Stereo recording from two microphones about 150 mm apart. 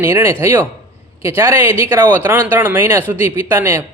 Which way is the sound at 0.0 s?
15° right (ahead or behind).